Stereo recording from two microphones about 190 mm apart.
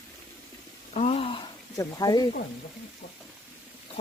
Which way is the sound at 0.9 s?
30° left (ahead or behind).